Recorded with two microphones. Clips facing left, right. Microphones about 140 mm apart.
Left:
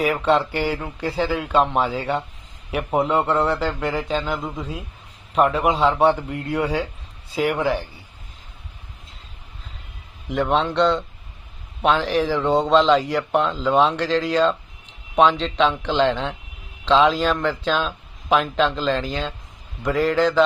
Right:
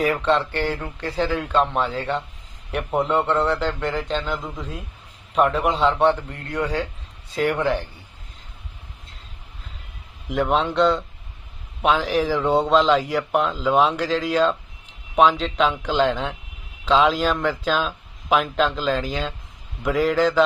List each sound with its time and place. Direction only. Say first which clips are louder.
0.0 s speech: left 1 dB; 10° left (ahead or behind)
10.2 s speech: even; 5° right (ahead or behind)